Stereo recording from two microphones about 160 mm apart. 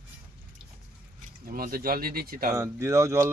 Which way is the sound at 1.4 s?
65° right (ahead or behind).